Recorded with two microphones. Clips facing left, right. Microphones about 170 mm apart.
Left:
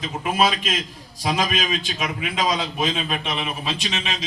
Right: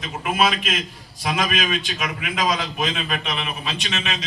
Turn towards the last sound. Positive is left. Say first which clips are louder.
# left 1 dB
turn(degrees=30)  # may be behind; listen again after turning